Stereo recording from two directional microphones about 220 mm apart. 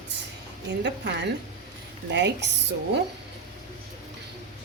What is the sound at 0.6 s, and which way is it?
A woman's voice, 55° right (ahead or behind).